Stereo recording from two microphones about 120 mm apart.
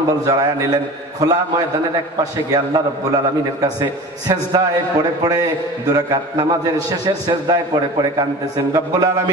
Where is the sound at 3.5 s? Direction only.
35° right (ahead or behind).